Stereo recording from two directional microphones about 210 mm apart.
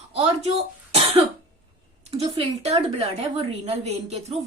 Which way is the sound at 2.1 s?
30° right (ahead or behind).